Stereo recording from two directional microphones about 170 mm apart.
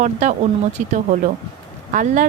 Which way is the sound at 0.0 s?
45° right (ahead or behind).